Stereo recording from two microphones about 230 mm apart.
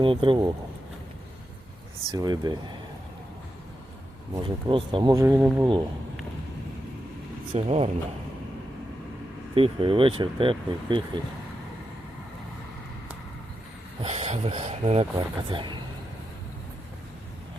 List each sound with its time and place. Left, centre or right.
0.0 s speech: right
2.1 s speech: centre
4.4 s speech: right
7.5 s speech: right
9.6 s speech: right
14.0 s speech: right